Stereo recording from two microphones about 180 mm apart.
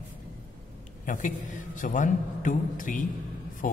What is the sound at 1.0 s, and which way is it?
A man's voice, 45° left (ahead or behind).